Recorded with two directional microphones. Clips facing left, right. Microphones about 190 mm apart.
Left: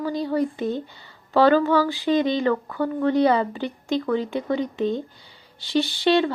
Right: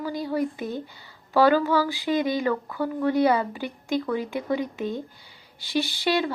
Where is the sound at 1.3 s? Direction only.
10° right (ahead or behind).